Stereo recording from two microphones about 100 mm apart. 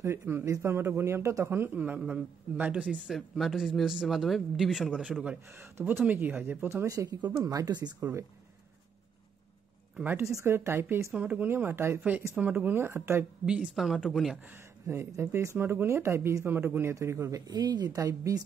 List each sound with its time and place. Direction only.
0.0 s speech: 25° right (ahead or behind)
3.1 s speech: centre (ahead or behind)
5.5 s speech: 25° right (ahead or behind); by 7.9 s 45° right (ahead or behind)
8.0 s speech: 30° right (ahead or behind)
9.9 s a woman's voice: 20° right (ahead or behind)
11.1 s speech: 15° right (ahead or behind)
13.7 s speech: centre (ahead or behind)
14.4 s speech: 25° right (ahead or behind)
17.5 s speech: 40° right (ahead or behind)